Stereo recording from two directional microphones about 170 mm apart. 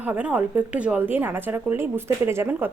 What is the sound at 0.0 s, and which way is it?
A woman's voice, 10° right (ahead or behind).